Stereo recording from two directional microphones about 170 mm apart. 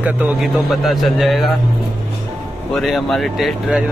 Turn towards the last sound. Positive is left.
turn(degrees=0)  # may be behind; listen again after turning